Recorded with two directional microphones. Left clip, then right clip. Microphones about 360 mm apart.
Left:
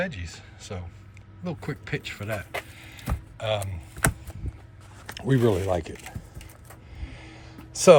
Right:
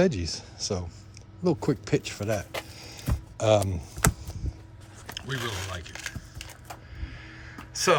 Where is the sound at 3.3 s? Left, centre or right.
Centre.